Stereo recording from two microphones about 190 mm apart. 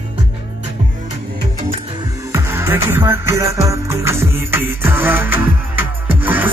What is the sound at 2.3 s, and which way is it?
Music, 15° right (ahead or behind).